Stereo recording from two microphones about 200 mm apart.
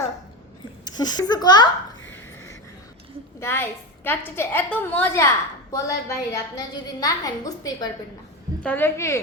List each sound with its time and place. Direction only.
0.9 s a child's voice: 20° left (ahead or behind)
3.4 s a woman's voice: 10° left (ahead or behind)